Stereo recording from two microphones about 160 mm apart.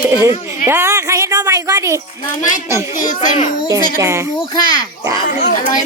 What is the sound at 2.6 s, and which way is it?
Speech, 20° right (ahead or behind).